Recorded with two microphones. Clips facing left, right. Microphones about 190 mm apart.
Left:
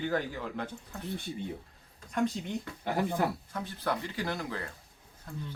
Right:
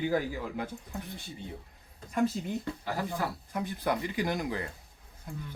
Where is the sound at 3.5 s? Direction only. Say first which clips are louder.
Right 3 dB; 15° right (ahead or behind).